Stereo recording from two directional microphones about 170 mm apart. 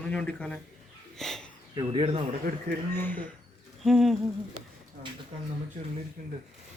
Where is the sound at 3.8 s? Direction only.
Centre (ahead or behind).